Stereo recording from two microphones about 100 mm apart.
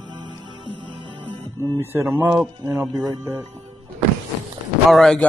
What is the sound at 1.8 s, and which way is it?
Speech, 25° right (ahead or behind).